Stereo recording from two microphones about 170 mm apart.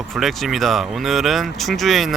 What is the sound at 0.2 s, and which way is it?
Speech, centre (ahead or behind).